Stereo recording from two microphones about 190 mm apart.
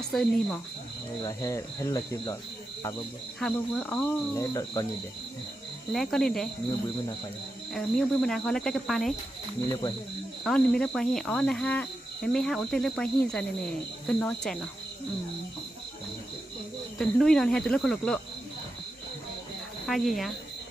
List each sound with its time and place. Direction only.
0.1 s speech: centre (ahead or behind)
1.2 s speech: 15° left (ahead or behind)
3.4 s speech: 5° left (ahead or behind)
4.5 s speech: 20° left (ahead or behind)
5.9 s speech: centre (ahead or behind)
7.7 s speech: centre (ahead or behind)
9.6 s speech: 25° left (ahead or behind)
10.4 s speech: 5° left (ahead or behind)
17.0 s speech: centre (ahead or behind)
19.9 s speech: centre (ahead or behind)